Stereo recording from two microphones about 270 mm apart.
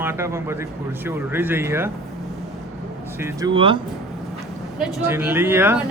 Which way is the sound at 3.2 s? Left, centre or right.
Centre.